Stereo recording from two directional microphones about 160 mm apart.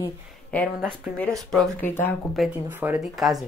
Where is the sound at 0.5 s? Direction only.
10° left (ahead or behind).